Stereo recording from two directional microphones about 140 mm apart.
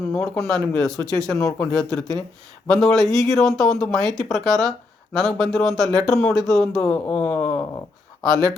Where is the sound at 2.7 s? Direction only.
Centre (ahead or behind).